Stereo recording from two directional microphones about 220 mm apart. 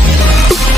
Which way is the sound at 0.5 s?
Centre (ahead or behind).